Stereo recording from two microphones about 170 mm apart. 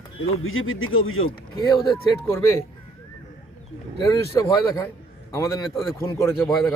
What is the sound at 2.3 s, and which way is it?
Speech, 15° left (ahead or behind).